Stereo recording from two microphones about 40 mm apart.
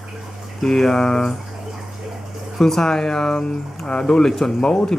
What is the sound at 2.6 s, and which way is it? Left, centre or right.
Speech, centre.